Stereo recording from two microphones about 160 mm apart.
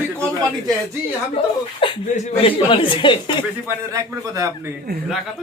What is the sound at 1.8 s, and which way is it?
A woman's voice, 35° left (ahead or behind).